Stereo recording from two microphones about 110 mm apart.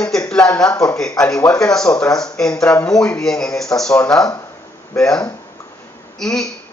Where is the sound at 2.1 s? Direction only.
5° left (ahead or behind).